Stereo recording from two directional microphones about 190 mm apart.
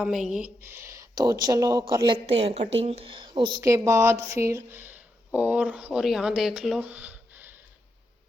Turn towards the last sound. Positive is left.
turn(degrees=-10)  # may be behind; listen again after turning